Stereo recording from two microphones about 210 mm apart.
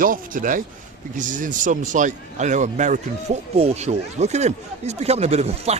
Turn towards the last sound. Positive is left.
turn(degrees=-30)  # may be behind; listen again after turning